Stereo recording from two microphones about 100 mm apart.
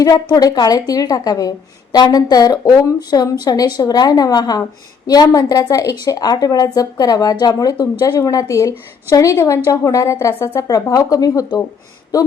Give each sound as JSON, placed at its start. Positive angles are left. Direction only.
{"t": 0.0, "sound": "a woman's voice", "side_deg": 40}